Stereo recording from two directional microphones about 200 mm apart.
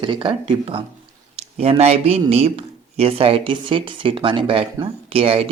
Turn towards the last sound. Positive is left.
turn(degrees=-30)  # may be behind; listen again after turning